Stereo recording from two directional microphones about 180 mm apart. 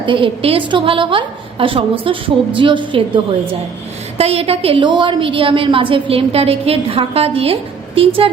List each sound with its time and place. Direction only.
0.0 s a woman's voice: 30° right (ahead or behind)